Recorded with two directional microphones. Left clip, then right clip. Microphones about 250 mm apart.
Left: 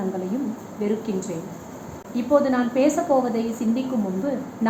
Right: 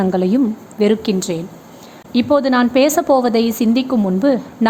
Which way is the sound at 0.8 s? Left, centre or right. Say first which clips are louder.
Right 10 dB; right.